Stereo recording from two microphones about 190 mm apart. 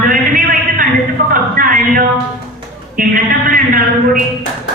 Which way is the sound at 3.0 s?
45° right (ahead or behind).